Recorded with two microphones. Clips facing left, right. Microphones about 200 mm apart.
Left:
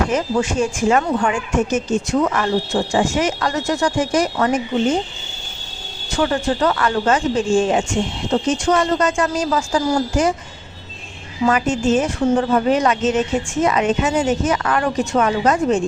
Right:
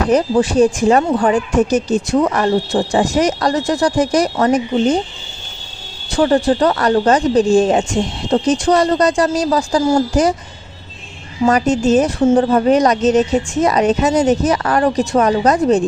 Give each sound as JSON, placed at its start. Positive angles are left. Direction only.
{"t": 0.1, "sound": "speech", "side_deg": -35}
{"t": 6.1, "sound": "speech", "side_deg": -35}
{"t": 11.4, "sound": "speech", "side_deg": -40}